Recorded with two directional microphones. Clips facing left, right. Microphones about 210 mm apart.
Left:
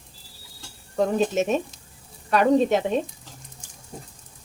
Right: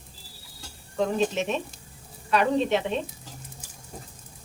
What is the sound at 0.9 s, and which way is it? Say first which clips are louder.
Cutlery: left 3 dB; 45° left (ahead or behind).